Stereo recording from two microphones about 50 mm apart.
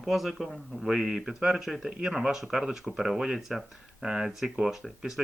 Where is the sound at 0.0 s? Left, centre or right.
Centre.